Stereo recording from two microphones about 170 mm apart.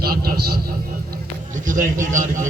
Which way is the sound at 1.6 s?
50° right (ahead or behind).